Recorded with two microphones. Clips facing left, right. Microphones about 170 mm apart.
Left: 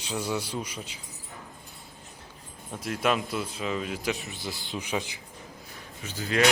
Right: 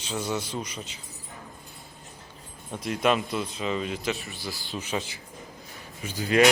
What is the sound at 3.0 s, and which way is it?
A man's voice, 5° left (ahead or behind).